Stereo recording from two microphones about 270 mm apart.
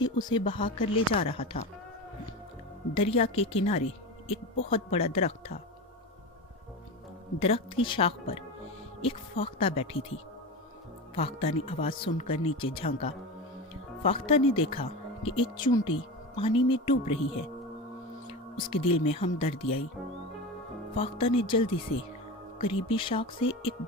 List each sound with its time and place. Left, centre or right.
0.3 s speech: centre
2.9 s speech: left
7.3 s speech: left
20.9 s speech: left